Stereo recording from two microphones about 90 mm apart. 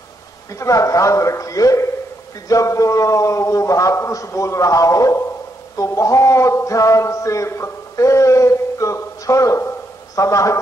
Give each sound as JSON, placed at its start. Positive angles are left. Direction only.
{"t": 0.6, "sound": "a man's voice", "side_deg": 35}